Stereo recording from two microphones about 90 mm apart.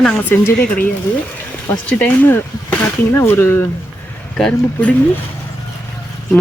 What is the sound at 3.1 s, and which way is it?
Speech, 25° left (ahead or behind).